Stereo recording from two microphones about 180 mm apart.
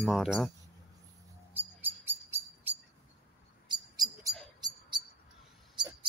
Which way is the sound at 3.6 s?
20° right (ahead or behind).